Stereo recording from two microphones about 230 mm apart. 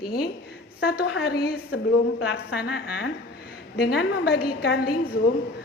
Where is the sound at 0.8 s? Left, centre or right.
Left.